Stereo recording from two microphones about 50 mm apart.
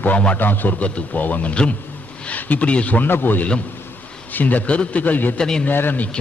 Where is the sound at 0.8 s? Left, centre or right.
Left.